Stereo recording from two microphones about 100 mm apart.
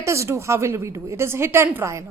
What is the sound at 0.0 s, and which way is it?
A woman's voice, 30° right (ahead or behind).